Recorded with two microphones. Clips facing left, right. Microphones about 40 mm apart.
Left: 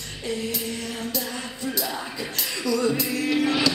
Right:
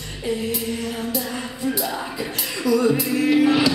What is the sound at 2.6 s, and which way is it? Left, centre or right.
Music, centre.